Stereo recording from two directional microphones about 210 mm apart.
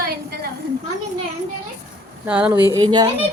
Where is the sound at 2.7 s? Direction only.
20° right (ahead or behind).